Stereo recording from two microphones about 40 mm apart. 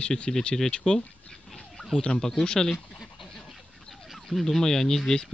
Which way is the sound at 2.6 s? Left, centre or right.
Centre.